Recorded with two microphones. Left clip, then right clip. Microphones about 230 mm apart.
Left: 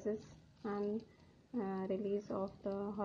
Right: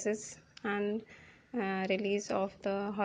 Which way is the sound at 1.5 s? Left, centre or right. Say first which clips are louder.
Right 7 dB; right.